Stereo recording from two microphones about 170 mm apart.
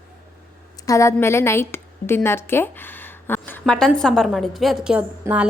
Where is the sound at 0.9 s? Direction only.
20° left (ahead or behind).